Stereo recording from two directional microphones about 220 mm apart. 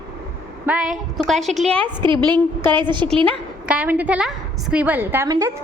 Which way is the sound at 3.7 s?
5° right (ahead or behind).